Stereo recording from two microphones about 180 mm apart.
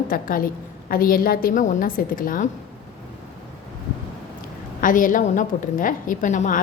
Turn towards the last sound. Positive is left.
turn(degrees=45)  # may be behind; listen again after turning